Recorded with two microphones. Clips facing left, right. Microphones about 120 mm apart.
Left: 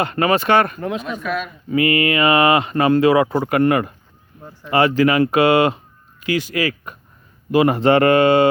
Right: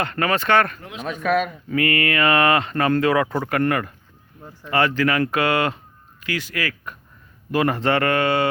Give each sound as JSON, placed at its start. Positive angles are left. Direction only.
{"t": 0.0, "sound": "speech", "side_deg": 15}
{"t": 0.8, "sound": "speech", "side_deg": 50}
{"t": 1.2, "sound": "speech", "side_deg": -60}
{"t": 1.7, "sound": "speech", "side_deg": 15}